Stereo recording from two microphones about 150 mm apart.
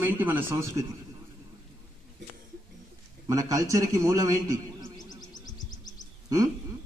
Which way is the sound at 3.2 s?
25° right (ahead or behind).